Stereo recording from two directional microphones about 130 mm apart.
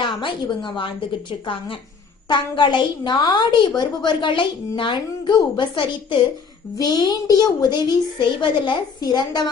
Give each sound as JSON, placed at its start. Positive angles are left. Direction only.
{"t": 0.0, "sound": "a woman's voice", "side_deg": 40}